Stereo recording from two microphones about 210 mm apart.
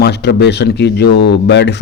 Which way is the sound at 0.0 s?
50° left (ahead or behind).